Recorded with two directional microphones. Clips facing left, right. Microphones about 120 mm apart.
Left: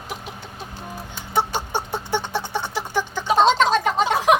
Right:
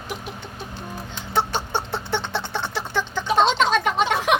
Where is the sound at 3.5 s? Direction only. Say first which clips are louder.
Left 1 dB; 40° left (ahead or behind).